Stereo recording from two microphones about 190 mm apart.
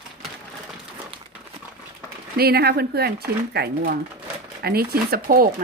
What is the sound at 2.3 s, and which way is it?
Speech, 55° right (ahead or behind).